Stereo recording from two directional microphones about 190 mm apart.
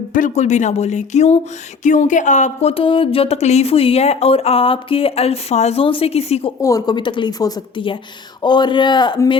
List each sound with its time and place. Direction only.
0.1 s speech: 40° left (ahead or behind)
6.6 s a woman's voice: 20° left (ahead or behind)